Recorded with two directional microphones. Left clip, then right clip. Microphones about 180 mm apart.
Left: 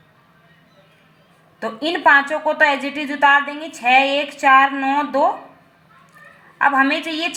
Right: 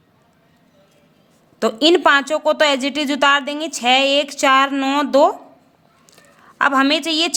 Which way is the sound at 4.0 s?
90° right.